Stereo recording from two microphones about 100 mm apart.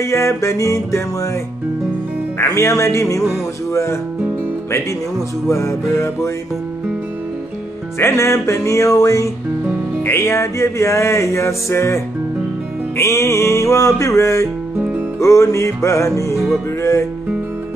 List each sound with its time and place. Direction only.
0.0 s music: 30° left (ahead or behind)
2.3 s music: 25° left (ahead or behind)
5.5 s music: 30° left (ahead or behind)
8.0 s music: 30° left (ahead or behind)